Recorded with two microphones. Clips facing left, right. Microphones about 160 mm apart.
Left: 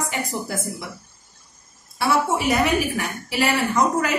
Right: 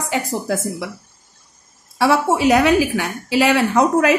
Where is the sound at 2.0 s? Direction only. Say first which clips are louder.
Right 5 dB; 90° right.